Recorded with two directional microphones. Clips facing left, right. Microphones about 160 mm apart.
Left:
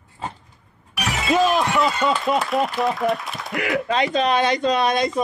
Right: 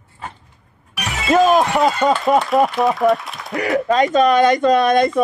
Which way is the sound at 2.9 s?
Centre (ahead or behind).